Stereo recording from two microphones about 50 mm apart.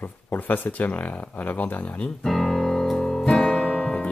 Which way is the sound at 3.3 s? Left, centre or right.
Centre.